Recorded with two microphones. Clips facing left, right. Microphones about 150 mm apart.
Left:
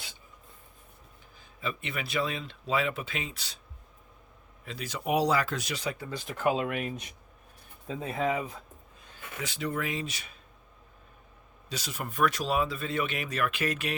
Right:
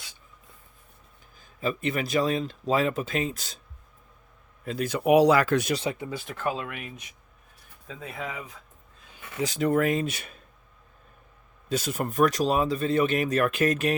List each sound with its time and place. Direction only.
1.6 s speech: 40° right (ahead or behind)
4.6 s speech: 50° right (ahead or behind); by 5.7 s 65° right (ahead or behind)
5.7 s speech: 25° right (ahead or behind)
6.1 s speech: 5° right (ahead or behind)
6.3 s speech: 15° left (ahead or behind)
6.7 s speech: 35° left (ahead or behind)
9.4 s speech: 45° right (ahead or behind)
11.7 s speech: 50° right (ahead or behind)